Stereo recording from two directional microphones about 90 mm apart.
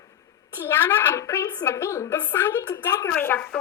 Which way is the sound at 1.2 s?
35° left (ahead or behind).